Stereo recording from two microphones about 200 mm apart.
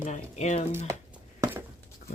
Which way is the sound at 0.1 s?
35° left (ahead or behind).